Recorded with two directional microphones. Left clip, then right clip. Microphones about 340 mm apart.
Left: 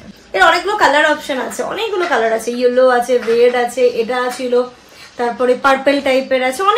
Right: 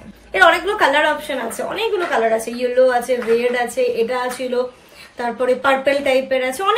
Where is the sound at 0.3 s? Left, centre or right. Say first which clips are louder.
Left 2 dB; centre.